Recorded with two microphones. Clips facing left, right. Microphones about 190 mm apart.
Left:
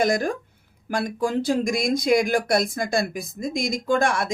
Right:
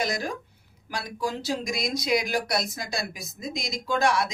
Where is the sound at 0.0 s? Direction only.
50° left (ahead or behind).